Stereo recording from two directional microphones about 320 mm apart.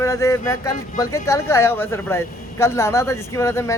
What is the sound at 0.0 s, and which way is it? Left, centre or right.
Speech, centre.